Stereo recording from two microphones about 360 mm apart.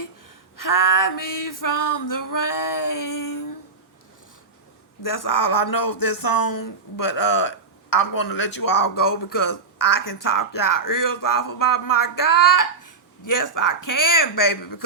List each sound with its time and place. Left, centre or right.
0.5 s speech: left
5.0 s speech: left